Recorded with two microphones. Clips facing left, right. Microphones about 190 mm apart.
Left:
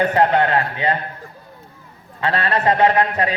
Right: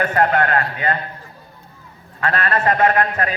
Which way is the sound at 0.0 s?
20° left (ahead or behind).